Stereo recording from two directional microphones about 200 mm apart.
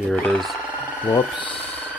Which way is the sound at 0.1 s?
5° left (ahead or behind).